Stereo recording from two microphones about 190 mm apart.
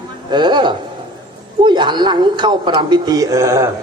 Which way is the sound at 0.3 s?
25° right (ahead or behind).